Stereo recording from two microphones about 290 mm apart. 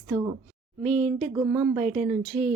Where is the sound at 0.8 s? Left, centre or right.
Right.